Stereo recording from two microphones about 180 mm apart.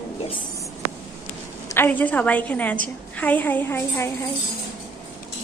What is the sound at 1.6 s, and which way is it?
A woman's voice, 10° left (ahead or behind).